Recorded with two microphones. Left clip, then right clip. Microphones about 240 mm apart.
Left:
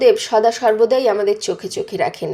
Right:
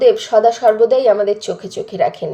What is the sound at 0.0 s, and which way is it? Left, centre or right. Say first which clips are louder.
Speech: right 2 dB; left.